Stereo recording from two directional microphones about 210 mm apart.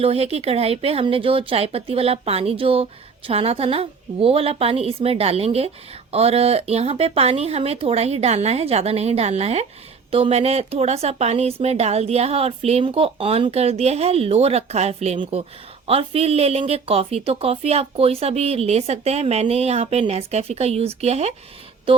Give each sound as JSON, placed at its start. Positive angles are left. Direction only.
{"t": 0.0, "sound": "a woman's voice", "side_deg": -30}
{"t": 21.9, "sound": "music", "side_deg": -25}